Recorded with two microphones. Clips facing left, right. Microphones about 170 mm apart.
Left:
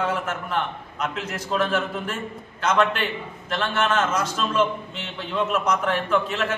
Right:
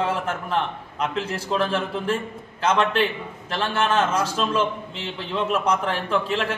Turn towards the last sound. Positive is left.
turn(degrees=-30)  # may be behind; listen again after turning